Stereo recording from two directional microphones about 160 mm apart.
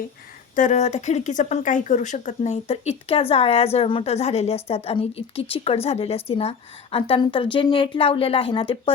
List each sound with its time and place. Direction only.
0.5 s speech: 50° left (ahead or behind); by 8.9 s 35° left (ahead or behind)